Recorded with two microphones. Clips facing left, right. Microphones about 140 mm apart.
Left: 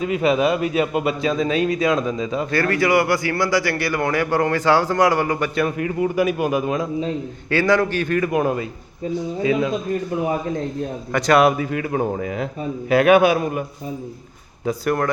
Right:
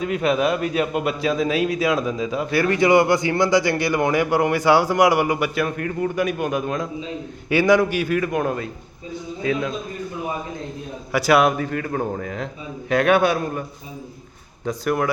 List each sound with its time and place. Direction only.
0.0 s a man's voice: centre (ahead or behind)
2.6 s a man's voice: 20° right (ahead or behind)
5.5 s a man's voice: 5° left (ahead or behind)
7.5 s a man's voice: 15° right (ahead or behind); by 9.7 s 5° left (ahead or behind)
11.1 s a man's voice: 5° right (ahead or behind)